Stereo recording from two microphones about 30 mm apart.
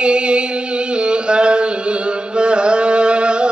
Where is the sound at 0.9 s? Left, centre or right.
Right.